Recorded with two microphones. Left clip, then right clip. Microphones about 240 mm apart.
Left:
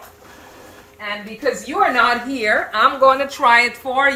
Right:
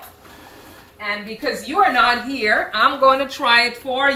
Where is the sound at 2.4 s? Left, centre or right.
Left.